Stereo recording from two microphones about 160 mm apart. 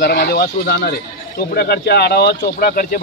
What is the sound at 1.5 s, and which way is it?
Speech, 90° left.